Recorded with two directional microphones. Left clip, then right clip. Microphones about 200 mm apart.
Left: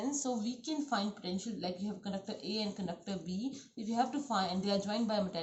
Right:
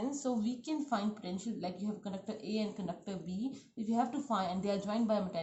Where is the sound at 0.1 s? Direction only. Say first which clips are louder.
Even; 45° right (ahead or behind).